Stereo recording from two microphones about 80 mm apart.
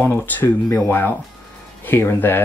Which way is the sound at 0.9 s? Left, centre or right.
Left.